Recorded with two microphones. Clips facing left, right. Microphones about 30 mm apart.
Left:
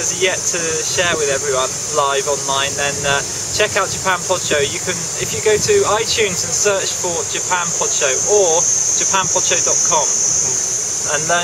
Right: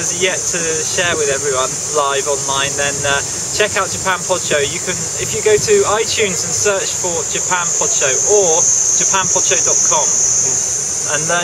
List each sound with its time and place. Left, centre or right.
0.2 s speech: centre
7.8 s speech: centre
11.1 s speech: centre